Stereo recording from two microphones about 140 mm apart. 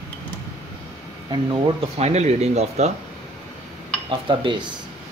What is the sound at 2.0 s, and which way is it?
Speech, 50° right (ahead or behind).